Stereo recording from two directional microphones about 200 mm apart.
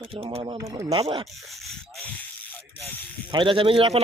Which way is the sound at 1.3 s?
Centre (ahead or behind).